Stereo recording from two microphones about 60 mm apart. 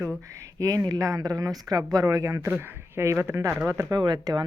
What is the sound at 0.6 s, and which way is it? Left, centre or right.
Speech, right.